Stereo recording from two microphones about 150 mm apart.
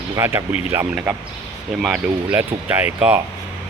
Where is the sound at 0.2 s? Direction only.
15° right (ahead or behind).